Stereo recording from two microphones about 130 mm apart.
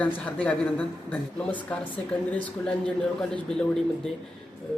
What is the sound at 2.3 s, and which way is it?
Speech, 5° left (ahead or behind).